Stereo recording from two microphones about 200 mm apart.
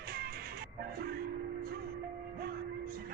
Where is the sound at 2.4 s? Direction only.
50° right (ahead or behind).